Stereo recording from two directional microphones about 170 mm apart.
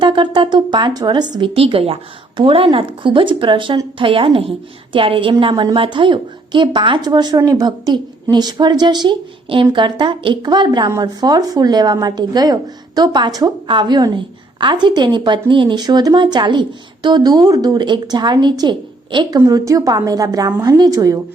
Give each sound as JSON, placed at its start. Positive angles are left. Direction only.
{"t": 0.0, "sound": "speech", "side_deg": -30}